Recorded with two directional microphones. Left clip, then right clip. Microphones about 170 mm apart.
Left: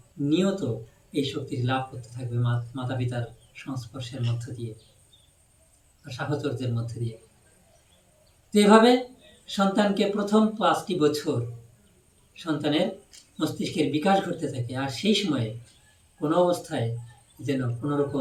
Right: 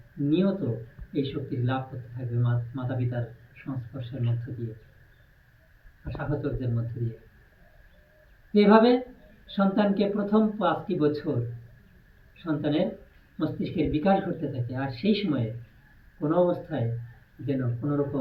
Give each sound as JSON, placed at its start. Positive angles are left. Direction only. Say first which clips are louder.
{"t": 0.3, "sound": "speech", "louder": "left 1 dB", "side_deg": 10}
{"t": 6.1, "sound": "speech", "louder": "left 2 dB", "side_deg": 10}
{"t": 8.5, "sound": "speech", "louder": "left 2 dB", "side_deg": 10}
{"t": 12.4, "sound": "speech", "louder": "left 2 dB", "side_deg": 10}